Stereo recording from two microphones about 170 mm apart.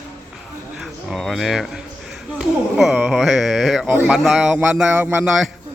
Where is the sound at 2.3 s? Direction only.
Centre (ahead or behind).